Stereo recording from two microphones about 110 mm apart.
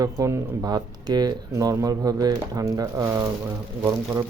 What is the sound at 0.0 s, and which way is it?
Speech, 30° right (ahead or behind).